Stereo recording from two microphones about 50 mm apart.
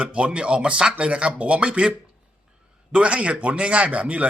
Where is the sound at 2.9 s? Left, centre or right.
Right.